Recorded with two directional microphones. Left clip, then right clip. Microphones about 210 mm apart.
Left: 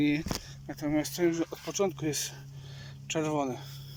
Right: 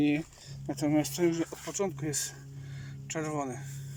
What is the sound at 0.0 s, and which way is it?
Speech, 5° right (ahead or behind).